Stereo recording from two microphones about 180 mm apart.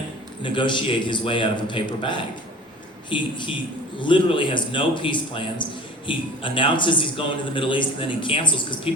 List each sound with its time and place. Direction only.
0.4 s a man's voice: 25° left (ahead or behind)